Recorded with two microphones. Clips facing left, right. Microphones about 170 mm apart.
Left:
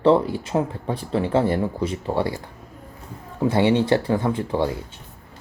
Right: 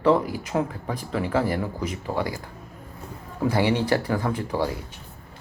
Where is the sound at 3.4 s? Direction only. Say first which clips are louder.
Left 4 dB; 25° left (ahead or behind).